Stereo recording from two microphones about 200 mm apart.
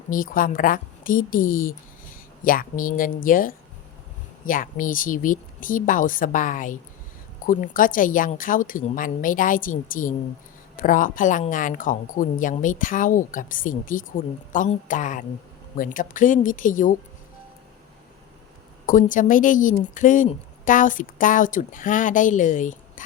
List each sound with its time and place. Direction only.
0.1 s a woman's voice: 45° left (ahead or behind)
18.9 s speech: 40° left (ahead or behind)